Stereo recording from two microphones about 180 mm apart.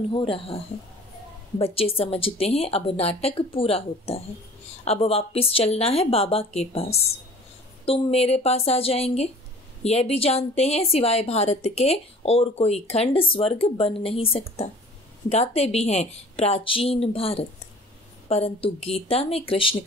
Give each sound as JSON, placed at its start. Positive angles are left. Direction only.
{"t": 0.1, "sound": "speech", "side_deg": 30}
{"t": 1.6, "sound": "a woman's voice", "side_deg": 30}